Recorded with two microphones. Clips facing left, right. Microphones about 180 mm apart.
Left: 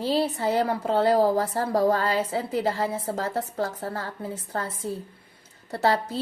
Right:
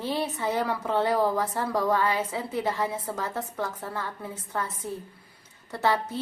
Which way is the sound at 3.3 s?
35° left (ahead or behind).